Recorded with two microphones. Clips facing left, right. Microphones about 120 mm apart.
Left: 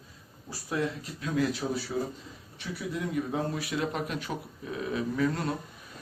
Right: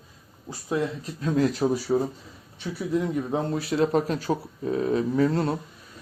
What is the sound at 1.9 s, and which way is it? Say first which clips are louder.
Speech: right 9 dB; 65° right (ahead or behind).